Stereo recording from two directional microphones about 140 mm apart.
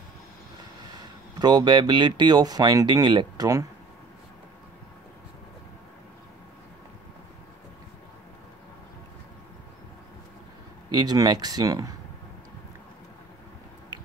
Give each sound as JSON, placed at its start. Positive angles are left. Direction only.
{"t": 0.9, "sound": "speech", "side_deg": -30}
{"t": 10.9, "sound": "speech", "side_deg": -30}